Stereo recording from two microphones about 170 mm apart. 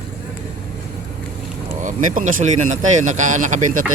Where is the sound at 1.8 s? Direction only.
50° right (ahead or behind).